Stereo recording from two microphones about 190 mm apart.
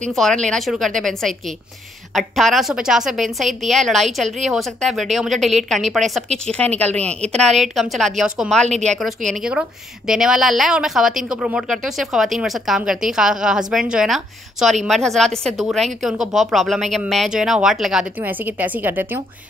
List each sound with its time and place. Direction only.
0.0 s a woman's voice: 5° left (ahead or behind)
8.6 s a woman's voice: 35° right (ahead or behind)
9.3 s a woman's voice: 5° right (ahead or behind)